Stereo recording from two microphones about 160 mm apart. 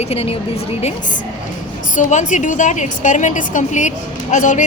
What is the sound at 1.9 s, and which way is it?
A woman's voice, 50° left (ahead or behind).